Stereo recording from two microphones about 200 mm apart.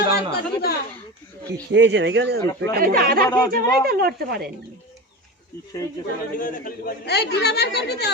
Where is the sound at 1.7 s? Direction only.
60° right (ahead or behind).